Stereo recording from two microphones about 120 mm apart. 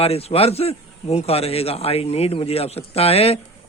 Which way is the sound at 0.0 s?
55° left (ahead or behind).